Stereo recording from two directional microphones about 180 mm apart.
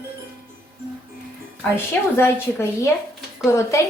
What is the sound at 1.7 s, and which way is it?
A woman's voice, 15° left (ahead or behind).